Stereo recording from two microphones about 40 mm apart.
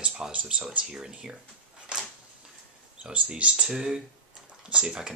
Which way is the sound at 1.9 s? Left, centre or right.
Centre.